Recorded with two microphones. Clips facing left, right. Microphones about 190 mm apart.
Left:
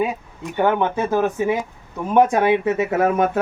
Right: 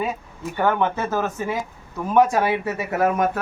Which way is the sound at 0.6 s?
15° left (ahead or behind).